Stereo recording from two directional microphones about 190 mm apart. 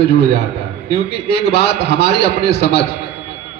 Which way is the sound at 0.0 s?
60° left (ahead or behind).